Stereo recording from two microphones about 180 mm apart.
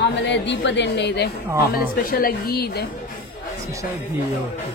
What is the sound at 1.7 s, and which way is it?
A woman's voice, 55° left (ahead or behind).